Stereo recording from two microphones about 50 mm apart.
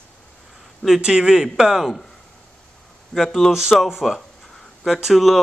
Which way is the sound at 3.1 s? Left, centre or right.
Centre.